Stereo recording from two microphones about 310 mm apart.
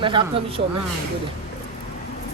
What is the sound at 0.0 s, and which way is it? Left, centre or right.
Speech, centre.